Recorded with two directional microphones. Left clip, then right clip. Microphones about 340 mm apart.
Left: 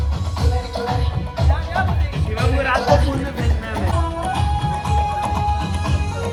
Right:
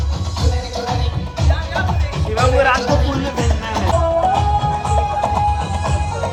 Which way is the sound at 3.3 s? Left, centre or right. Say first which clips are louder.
Right 5 dB; centre.